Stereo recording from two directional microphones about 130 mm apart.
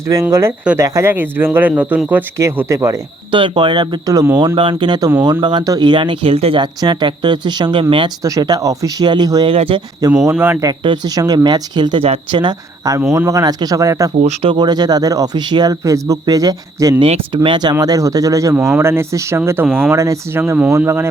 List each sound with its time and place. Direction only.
0.1 s speech: 25° right (ahead or behind)
3.3 s speech: 40° right (ahead or behind)
6.6 s speech: 35° right (ahead or behind)
8.2 s speech: 30° right (ahead or behind)
9.5 s speech: 45° right (ahead or behind)
10.0 s speech: 25° right (ahead or behind)
10.3 s speech: 15° right (ahead or behind)
10.7 s speech: 30° right (ahead or behind)
12.0 s speech: 50° right (ahead or behind)
12.4 s speech: 30° right (ahead or behind)
14.4 s speech: 35° right (ahead or behind)
17.0 s speech: 40° right (ahead or behind); by 21.1 s 20° right (ahead or behind)